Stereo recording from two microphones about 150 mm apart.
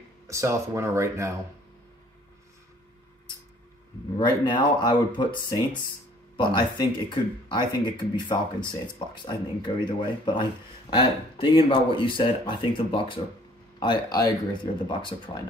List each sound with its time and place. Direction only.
0.3 s speech: 20° right (ahead or behind)
4.2 s speech: 30° left (ahead or behind)